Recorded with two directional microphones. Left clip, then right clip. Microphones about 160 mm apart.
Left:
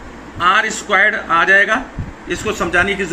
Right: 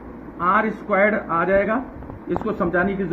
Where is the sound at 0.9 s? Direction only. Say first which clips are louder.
Left 5 dB; 40° right (ahead or behind).